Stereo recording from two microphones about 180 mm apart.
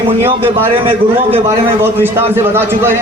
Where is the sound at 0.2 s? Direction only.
10° right (ahead or behind).